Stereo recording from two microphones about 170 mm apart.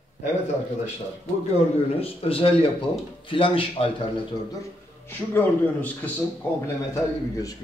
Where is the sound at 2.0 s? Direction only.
35° left (ahead or behind).